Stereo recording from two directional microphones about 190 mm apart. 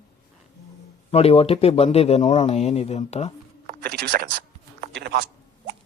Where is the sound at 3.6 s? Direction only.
55° right (ahead or behind).